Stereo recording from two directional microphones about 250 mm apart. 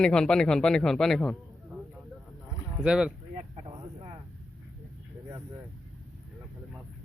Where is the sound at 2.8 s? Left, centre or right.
Centre.